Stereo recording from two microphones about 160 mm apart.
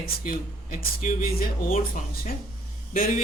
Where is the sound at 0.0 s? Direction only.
60° left (ahead or behind).